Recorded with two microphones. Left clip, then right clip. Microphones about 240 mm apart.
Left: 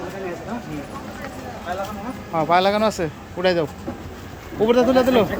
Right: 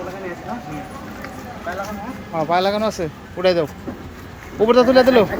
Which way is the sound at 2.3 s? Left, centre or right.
Centre.